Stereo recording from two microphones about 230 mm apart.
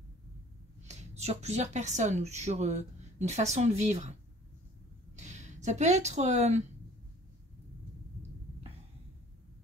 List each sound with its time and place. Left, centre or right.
0.8 s speech: right
5.1 s speech: right